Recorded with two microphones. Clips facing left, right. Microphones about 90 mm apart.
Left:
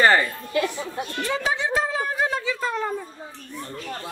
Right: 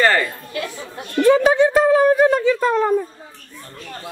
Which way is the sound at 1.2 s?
50° right (ahead or behind).